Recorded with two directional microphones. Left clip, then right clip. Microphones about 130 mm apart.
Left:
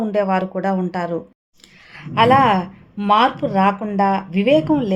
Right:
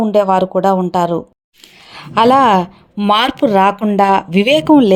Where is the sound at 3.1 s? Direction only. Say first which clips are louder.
Right 3 dB; 80° right; by 5.0 s 65° right (ahead or behind).